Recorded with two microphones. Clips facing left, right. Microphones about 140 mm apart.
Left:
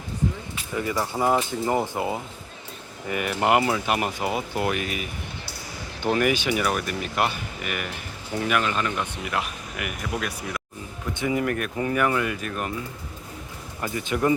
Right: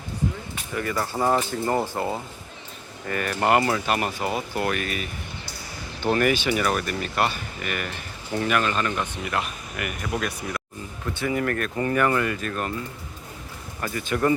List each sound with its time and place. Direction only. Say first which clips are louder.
0.8 s speech: even; 15° left (ahead or behind)
11.1 s speech: left 1 dB; 20° left (ahead or behind)
13.8 s speech: even; 15° left (ahead or behind)